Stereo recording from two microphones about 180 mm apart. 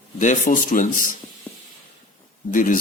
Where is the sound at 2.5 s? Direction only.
45° left (ahead or behind).